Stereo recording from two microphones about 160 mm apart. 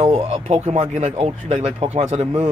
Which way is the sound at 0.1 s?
45° right (ahead or behind).